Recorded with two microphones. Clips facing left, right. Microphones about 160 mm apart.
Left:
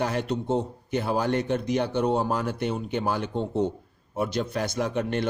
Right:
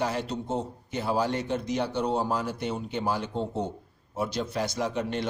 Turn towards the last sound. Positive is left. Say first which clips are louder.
# left 3 dB
turn(degrees=55)  # may be behind; listen again after turning